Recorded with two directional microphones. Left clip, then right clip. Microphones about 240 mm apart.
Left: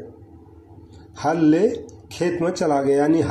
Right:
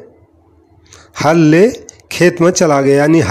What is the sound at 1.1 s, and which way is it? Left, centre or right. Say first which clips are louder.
Speech: right 9 dB; right.